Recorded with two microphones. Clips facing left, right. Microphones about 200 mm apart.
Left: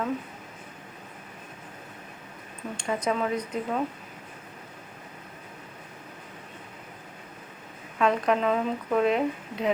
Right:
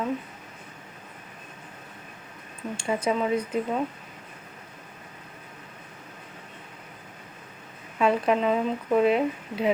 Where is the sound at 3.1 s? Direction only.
5° right (ahead or behind).